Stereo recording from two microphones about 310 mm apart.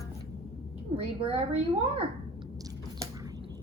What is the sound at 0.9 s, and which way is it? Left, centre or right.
Speech, centre.